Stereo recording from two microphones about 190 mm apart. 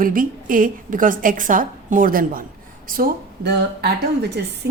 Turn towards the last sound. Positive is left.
turn(degrees=-60)  # may be behind; listen again after turning